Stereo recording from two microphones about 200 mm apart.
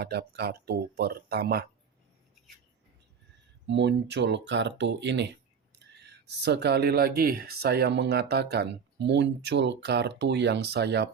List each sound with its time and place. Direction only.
0.0 s speech: 55° right (ahead or behind)
3.7 s speech: 60° right (ahead or behind)